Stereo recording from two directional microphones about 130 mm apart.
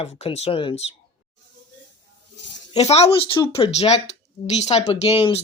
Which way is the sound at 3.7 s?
55° left (ahead or behind).